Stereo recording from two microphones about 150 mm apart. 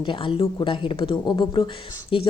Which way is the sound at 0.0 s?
35° left (ahead or behind).